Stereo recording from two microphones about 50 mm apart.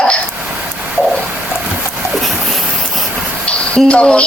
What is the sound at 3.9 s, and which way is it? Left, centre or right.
Speech, left.